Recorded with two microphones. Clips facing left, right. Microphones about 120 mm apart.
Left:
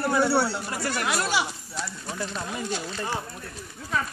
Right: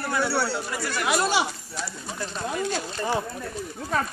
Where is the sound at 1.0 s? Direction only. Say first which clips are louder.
Right 4 dB; 20° right (ahead or behind).